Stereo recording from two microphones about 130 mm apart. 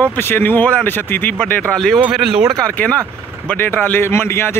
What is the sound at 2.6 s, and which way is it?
Speech, 10° left (ahead or behind).